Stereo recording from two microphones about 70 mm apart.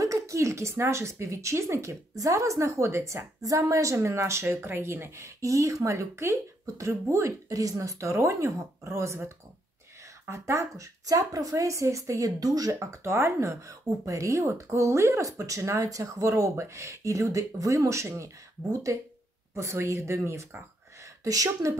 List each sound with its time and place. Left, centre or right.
0.0 s speech: right
12.7 s speech: right
21.0 s speech: right